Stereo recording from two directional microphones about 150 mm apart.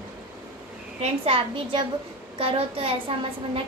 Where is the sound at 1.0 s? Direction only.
40° right (ahead or behind).